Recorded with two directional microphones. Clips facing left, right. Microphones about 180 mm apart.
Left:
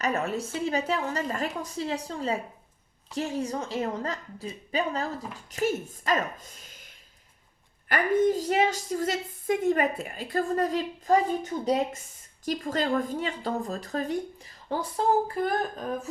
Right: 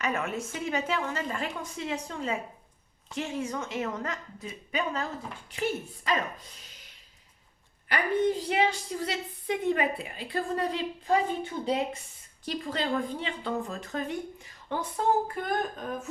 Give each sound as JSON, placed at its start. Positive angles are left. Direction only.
{"t": 0.0, "sound": "a woman's voice", "side_deg": 35}
{"t": 7.9, "sound": "a woman's voice", "side_deg": 45}